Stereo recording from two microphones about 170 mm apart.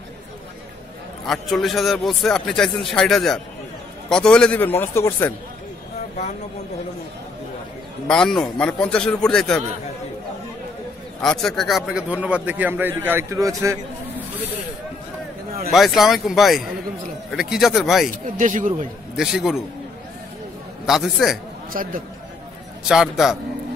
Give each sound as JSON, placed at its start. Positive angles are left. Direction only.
{"t": 1.2, "sound": "a man's voice", "side_deg": 0}
{"t": 8.1, "sound": "a man's voice", "side_deg": 5}
{"t": 11.1, "sound": "speech", "side_deg": 5}
{"t": 15.7, "sound": "a man's voice", "side_deg": 0}
{"t": 18.2, "sound": "speech", "side_deg": -50}
{"t": 19.1, "sound": "a man's voice", "side_deg": 0}
{"t": 20.8, "sound": "a man's voice", "side_deg": 0}
{"t": 21.7, "sound": "speech", "side_deg": -55}
{"t": 22.8, "sound": "a man's voice", "side_deg": 0}